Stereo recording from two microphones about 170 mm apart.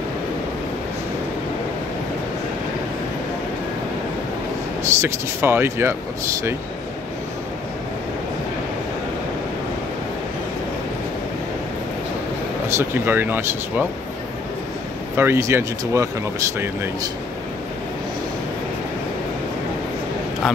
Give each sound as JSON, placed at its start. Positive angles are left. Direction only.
{"t": 4.8, "sound": "speech", "side_deg": -15}
{"t": 12.6, "sound": "speech", "side_deg": -15}
{"t": 15.1, "sound": "speech", "side_deg": -15}